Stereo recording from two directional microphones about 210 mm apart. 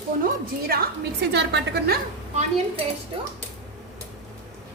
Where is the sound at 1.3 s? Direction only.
55° right (ahead or behind).